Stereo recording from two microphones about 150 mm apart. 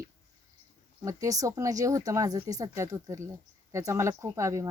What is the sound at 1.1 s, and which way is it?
Speech, 20° right (ahead or behind).